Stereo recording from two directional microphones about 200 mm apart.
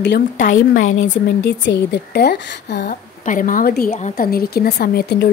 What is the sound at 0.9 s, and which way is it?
Speech, 70° left (ahead or behind).